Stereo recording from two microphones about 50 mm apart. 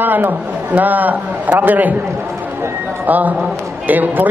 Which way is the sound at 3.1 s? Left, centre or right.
Right.